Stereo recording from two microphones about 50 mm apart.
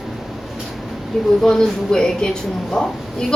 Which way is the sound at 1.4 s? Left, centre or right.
Centre.